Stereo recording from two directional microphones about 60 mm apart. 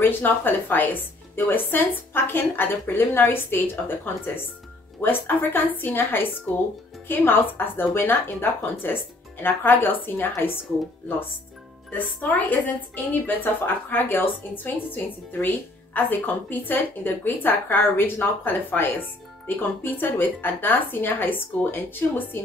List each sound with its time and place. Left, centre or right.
0.0 s speech: left
12.0 s speech: left